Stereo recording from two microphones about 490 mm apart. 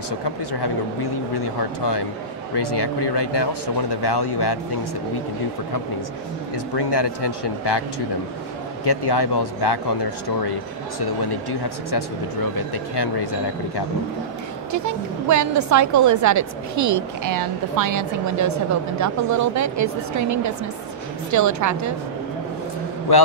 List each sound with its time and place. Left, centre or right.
0.2 s speech: left
6.5 s speech: left
8.8 s speech: left
12.5 s speech: left
14.7 s a woman's voice: right
23.1 s speech: left